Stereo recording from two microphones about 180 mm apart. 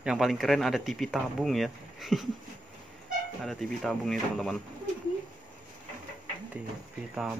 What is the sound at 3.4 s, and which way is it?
Speech, centre (ahead or behind).